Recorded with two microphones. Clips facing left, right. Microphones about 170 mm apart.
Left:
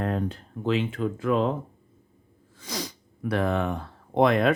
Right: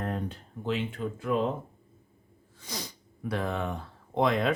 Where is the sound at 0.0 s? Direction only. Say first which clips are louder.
Left 5 dB; 90° left.